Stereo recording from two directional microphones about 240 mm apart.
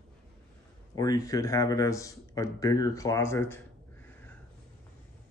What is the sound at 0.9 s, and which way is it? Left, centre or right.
Speech, centre.